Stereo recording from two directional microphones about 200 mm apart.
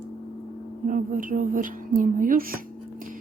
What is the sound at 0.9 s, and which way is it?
Speech, 40° right (ahead or behind).